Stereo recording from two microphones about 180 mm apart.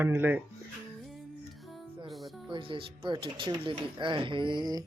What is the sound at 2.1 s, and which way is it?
Music, centre (ahead or behind).